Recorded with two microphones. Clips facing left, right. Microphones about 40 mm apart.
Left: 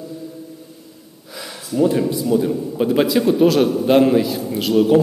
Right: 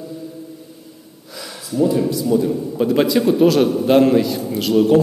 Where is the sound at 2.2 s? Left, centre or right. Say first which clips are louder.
Even; centre.